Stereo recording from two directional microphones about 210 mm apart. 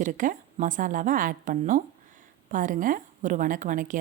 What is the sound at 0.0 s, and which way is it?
A woman's voice, 40° right (ahead or behind).